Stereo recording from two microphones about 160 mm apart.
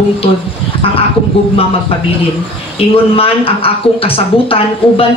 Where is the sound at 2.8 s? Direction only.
35° left (ahead or behind).